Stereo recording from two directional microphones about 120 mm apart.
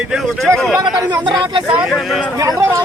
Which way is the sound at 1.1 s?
40° right (ahead or behind).